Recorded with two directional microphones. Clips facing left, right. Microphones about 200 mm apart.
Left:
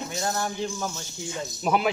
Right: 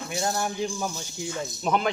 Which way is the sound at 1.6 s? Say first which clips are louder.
Left 1 dB; 5° left (ahead or behind).